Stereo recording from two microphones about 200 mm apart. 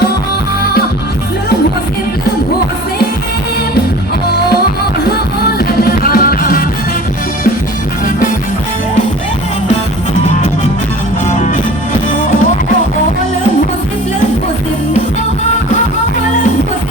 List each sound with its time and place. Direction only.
5.0 s music: 50° left (ahead or behind)